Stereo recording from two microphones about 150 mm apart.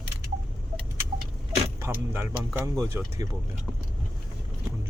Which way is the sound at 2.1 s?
15° right (ahead or behind).